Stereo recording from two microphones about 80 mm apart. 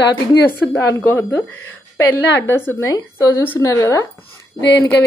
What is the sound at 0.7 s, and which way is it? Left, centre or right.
Speech, left.